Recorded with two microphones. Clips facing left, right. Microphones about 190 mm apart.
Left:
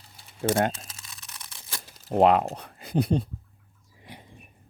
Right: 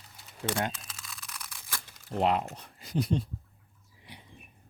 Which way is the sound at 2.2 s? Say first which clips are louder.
Left 8 dB; 65° left (ahead or behind).